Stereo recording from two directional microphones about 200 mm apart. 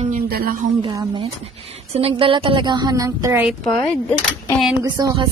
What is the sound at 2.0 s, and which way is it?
A woman's voice, 30° right (ahead or behind).